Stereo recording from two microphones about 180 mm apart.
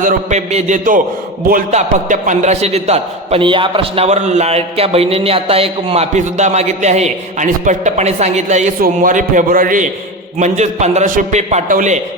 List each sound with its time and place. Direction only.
0.0 s a man's voice: 40° right (ahead or behind)